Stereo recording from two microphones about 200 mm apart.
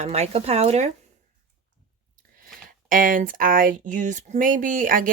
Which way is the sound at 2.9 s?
45° right (ahead or behind).